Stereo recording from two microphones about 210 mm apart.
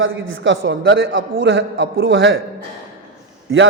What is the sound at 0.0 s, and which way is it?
A man's voice, 70° right (ahead or behind).